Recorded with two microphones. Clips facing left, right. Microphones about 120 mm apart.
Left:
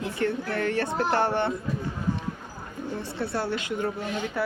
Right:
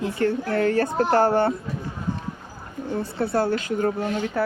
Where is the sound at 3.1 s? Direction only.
45° right (ahead or behind).